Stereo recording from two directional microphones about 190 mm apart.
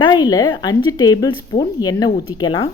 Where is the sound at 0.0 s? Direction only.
20° left (ahead or behind).